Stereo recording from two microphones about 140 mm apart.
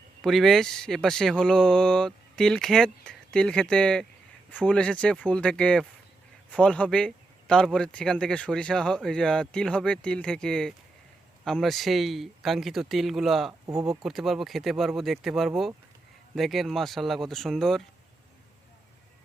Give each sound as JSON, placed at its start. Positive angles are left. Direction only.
{"t": 0.2, "sound": "speech", "side_deg": 0}
{"t": 13.5, "sound": "speech", "side_deg": -20}
{"t": 14.0, "sound": "speech", "side_deg": 0}